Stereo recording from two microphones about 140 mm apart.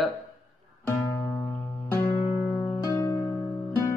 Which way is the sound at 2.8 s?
20° left (ahead or behind).